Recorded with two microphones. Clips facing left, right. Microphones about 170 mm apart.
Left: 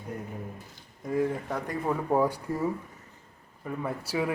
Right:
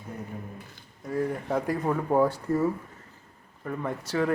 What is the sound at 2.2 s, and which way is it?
Speech, 15° left (ahead or behind).